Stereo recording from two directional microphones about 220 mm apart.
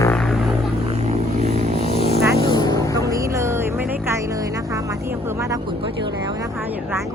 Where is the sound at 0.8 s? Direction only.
30° right (ahead or behind).